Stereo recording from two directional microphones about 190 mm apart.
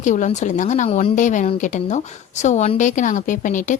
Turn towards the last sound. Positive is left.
turn(degrees=40)  # may be behind; listen again after turning